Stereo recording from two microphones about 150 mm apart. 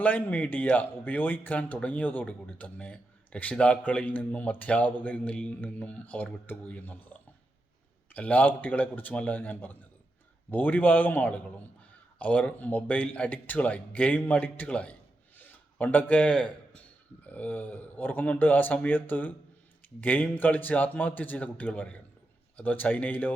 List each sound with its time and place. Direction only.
0.0 s speech: 10° left (ahead or behind)
15.4 s a sound: 10° left (ahead or behind)
17.2 s speech: 10° left (ahead or behind)